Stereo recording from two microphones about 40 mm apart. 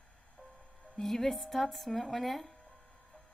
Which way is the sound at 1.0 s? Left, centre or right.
Centre.